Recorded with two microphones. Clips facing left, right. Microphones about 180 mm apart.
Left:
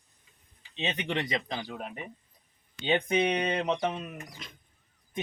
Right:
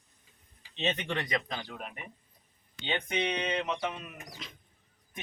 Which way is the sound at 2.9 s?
45° left (ahead or behind).